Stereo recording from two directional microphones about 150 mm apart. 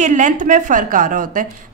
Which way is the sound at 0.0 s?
55° right (ahead or behind).